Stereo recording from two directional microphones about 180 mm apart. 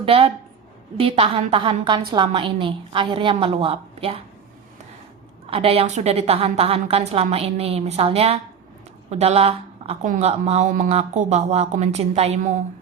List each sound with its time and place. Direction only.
0.0 s a woman's voice: 30° right (ahead or behind)
5.5 s a woman's voice: 35° right (ahead or behind)